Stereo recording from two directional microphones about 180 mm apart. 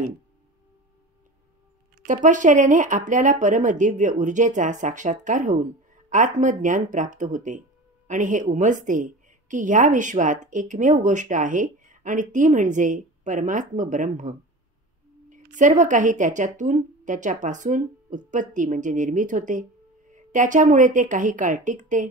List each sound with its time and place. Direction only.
2.0 s a woman's voice: 45° right (ahead or behind)
15.5 s a woman's voice: 45° right (ahead or behind)